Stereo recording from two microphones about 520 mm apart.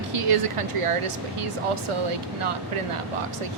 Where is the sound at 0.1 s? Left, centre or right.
Right.